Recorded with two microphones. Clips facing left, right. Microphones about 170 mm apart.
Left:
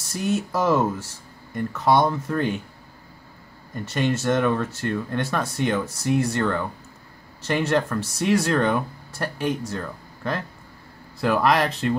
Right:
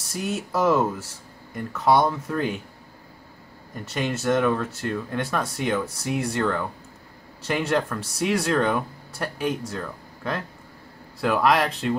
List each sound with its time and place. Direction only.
0.0 s speech: centre (ahead or behind)
3.7 s speech: centre (ahead or behind)